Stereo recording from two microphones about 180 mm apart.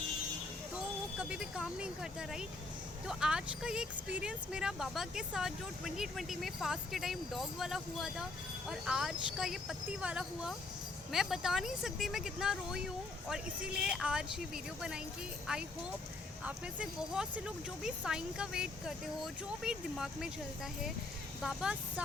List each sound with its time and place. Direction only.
1.3 s speech: 5° right (ahead or behind)
16.4 s speech: 5° right (ahead or behind)
21.4 s speech: 5° right (ahead or behind)